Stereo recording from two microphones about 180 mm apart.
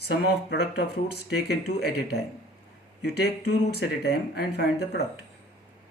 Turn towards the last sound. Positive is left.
turn(degrees=65)  # may be behind; listen again after turning